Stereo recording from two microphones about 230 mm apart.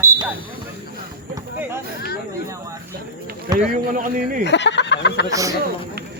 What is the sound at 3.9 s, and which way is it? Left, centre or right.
Speech, right.